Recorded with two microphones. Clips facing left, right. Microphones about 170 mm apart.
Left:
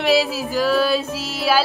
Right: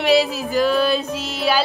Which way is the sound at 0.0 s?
Centre (ahead or behind).